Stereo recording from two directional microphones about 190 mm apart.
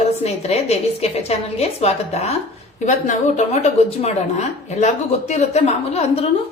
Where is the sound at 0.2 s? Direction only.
35° left (ahead or behind).